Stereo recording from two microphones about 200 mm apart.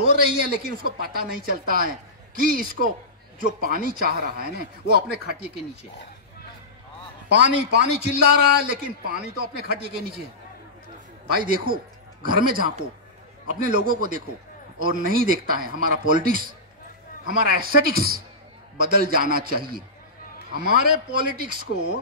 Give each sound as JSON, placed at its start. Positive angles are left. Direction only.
{"t": 0.3, "sound": "a man's voice", "side_deg": -50}
{"t": 7.2, "sound": "a man's voice", "side_deg": -55}
{"t": 11.3, "sound": "a man's voice", "side_deg": -45}
{"t": 17.6, "sound": "a man's voice", "side_deg": -45}